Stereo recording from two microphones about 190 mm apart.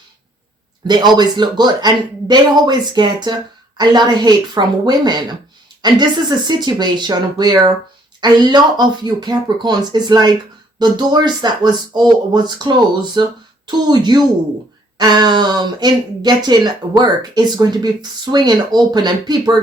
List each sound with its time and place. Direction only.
0.9 s speech: 25° right (ahead or behind)